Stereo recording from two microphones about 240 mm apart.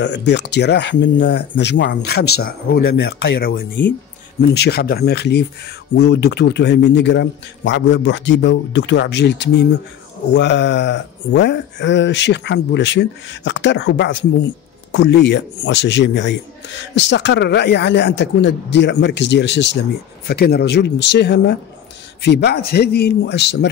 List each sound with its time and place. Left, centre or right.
0.0 s speech: left